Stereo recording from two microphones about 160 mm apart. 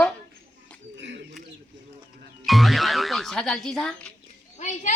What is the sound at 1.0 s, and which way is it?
Speech, 90° right.